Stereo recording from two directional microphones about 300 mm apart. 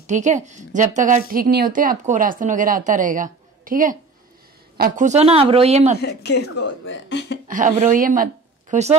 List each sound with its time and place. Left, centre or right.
0.0 s a woman's voice: right
5.9 s speech: left
7.4 s speech: right